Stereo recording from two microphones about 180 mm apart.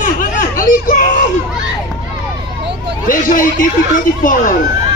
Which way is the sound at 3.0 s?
50° left (ahead or behind).